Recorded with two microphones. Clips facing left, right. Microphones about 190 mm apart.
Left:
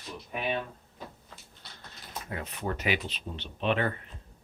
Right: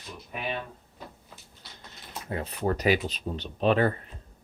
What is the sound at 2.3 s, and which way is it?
Speech, 35° right (ahead or behind).